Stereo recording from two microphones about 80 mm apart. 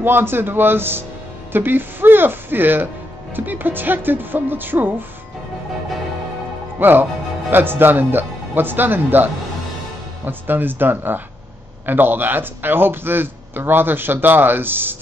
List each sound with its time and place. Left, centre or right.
0.0 s a man's voice: right
6.8 s a man's voice: right